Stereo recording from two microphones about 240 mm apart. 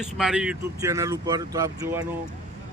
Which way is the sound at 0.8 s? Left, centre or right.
Centre.